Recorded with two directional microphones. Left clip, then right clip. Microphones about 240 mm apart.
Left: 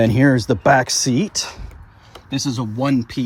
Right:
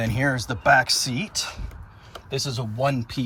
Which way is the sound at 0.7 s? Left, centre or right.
Left.